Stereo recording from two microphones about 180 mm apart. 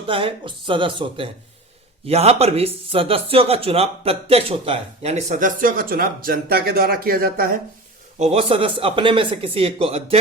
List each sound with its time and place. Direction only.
0.1 s speech: 30° right (ahead or behind); by 7.6 s 55° right (ahead or behind)
8.2 s speech: 35° right (ahead or behind)